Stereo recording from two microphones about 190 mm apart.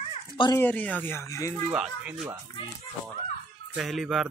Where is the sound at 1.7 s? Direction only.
5° right (ahead or behind).